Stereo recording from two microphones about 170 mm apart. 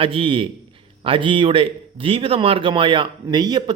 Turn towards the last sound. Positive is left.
turn(degrees=-25)  # may be behind; listen again after turning